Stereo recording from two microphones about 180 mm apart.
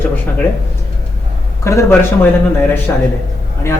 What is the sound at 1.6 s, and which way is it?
Speech, 15° left (ahead or behind).